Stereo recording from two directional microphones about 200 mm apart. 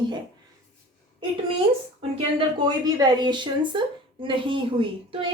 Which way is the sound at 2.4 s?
20° right (ahead or behind).